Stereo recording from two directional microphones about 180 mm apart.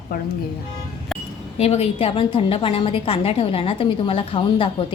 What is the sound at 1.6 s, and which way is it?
A woman's voice, 35° left (ahead or behind).